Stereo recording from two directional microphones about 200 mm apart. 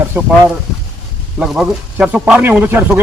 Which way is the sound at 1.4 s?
5° right (ahead or behind).